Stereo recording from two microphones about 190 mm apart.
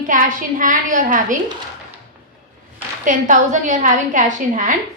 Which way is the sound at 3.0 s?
40° right (ahead or behind).